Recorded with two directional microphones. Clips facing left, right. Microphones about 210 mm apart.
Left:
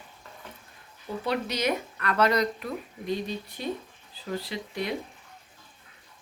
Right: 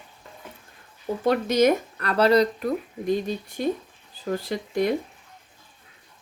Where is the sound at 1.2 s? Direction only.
45° right (ahead or behind).